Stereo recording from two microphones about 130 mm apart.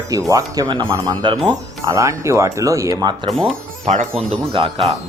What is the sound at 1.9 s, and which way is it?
Speech, 25° right (ahead or behind).